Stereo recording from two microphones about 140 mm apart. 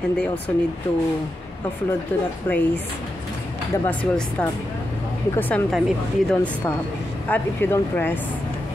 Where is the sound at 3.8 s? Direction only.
10° left (ahead or behind).